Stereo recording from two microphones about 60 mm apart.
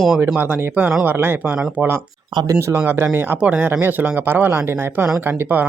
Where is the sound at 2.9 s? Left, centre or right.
Right.